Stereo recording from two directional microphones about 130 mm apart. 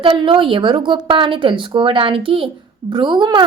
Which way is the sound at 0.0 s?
40° right (ahead or behind).